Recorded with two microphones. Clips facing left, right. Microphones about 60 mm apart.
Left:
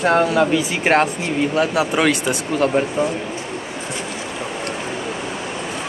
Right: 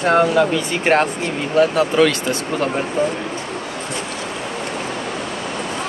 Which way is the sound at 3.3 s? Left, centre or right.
Right.